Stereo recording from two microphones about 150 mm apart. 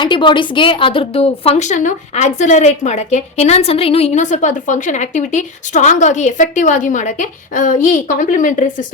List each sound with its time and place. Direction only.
0.0 s a woman's voice: 30° left (ahead or behind); by 8.7 s 60° left (ahead or behind)